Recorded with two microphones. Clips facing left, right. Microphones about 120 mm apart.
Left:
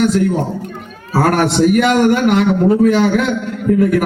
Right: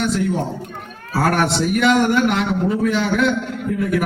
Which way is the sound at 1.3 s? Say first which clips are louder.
Left 7 dB; 55° left (ahead or behind).